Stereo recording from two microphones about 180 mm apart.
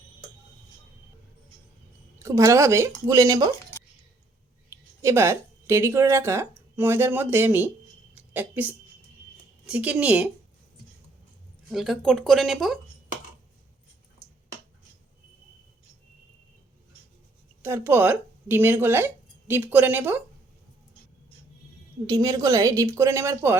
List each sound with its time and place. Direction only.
2.1 s a woman's voice: 15° right (ahead or behind)
4.7 s speech: 15° right (ahead or behind)
8.1 s a sound: 10° right (ahead or behind)
9.6 s a woman's voice: 5° right (ahead or behind)
11.7 s speech: centre (ahead or behind)
17.6 s speech: 15° right (ahead or behind)
22.0 s a woman's voice: 20° right (ahead or behind)